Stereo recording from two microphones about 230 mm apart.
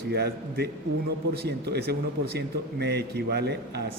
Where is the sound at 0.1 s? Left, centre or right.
Right.